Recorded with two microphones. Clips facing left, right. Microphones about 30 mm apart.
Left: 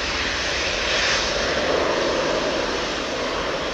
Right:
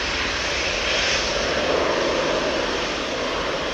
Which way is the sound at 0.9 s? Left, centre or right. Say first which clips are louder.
Left 2 dB; left.